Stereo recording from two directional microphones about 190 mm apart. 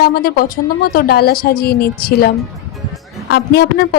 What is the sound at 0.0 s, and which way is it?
A woman's voice, 55° left (ahead or behind).